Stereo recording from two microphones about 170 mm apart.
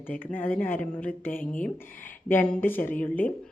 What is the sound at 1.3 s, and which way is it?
Speech, 55° left (ahead or behind).